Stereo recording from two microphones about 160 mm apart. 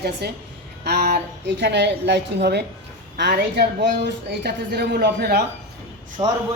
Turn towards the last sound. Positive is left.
turn(degrees=-30)  # may be behind; listen again after turning